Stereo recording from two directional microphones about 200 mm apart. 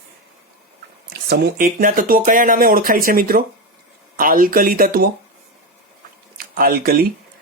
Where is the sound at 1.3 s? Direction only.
50° right (ahead or behind).